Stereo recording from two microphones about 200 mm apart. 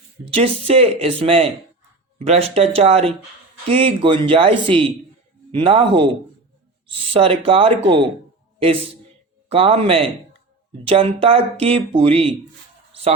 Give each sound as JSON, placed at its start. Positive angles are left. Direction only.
{"t": 0.3, "sound": "speech", "side_deg": -25}
{"t": 7.1, "sound": "a man's voice", "side_deg": -25}
{"t": 12.9, "sound": "a sound", "side_deg": -30}